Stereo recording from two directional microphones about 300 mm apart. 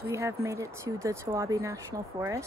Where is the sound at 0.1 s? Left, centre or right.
Centre.